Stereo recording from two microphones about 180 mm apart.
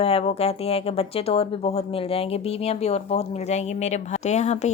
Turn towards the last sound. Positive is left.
turn(degrees=40)  # may be behind; listen again after turning